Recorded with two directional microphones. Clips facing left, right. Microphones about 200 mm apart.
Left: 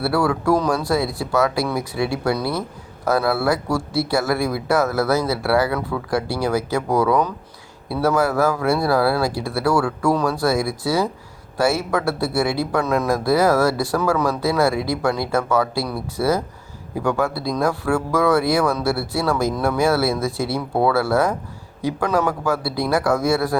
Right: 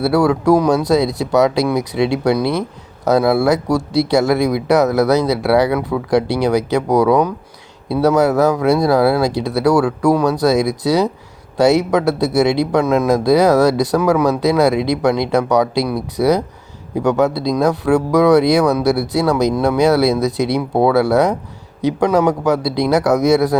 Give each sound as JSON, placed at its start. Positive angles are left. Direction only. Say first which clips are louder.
{"t": 0.0, "sound": "speech", "louder": "right 6 dB", "side_deg": -20}